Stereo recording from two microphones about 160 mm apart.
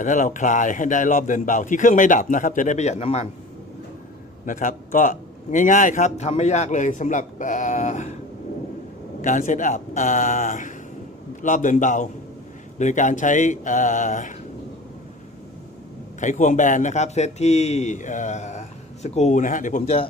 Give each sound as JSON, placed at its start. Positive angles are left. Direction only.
{"t": 0.0, "sound": "a man's voice", "side_deg": 55}
{"t": 4.4, "sound": "a man's voice", "side_deg": 55}
{"t": 9.2, "sound": "a man's voice", "side_deg": 50}
{"t": 16.2, "sound": "a man's voice", "side_deg": 50}